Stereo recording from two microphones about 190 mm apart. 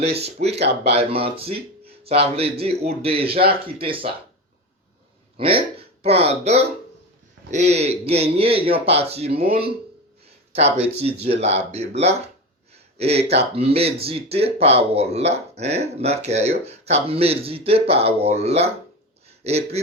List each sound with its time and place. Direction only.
0.0 s speech: 35° right (ahead or behind)
5.4 s speech: 30° right (ahead or behind)
11.0 s speech: 30° right (ahead or behind)